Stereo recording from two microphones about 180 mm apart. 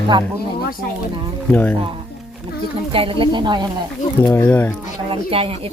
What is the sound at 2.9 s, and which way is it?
Speech, 30° right (ahead or behind).